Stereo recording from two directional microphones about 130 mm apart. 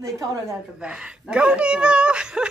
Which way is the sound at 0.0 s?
25° right (ahead or behind).